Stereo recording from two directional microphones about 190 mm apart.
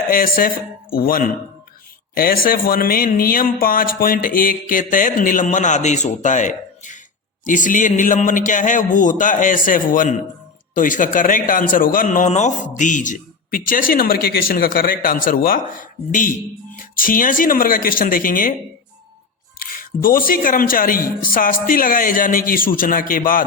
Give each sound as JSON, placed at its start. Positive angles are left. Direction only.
{"t": 0.1, "sound": "a man's voice", "side_deg": 45}
{"t": 19.5, "sound": "a man's voice", "side_deg": 50}